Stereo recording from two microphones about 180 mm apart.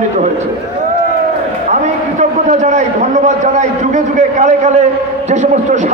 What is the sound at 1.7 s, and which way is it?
A man's voice, 40° right (ahead or behind).